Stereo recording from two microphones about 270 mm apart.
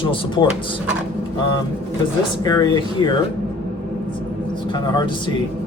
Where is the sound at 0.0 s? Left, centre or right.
Centre.